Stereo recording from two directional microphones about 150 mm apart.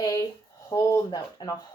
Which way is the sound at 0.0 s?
25° left (ahead or behind).